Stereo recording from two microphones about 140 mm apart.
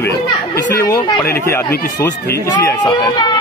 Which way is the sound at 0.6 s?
25° left (ahead or behind).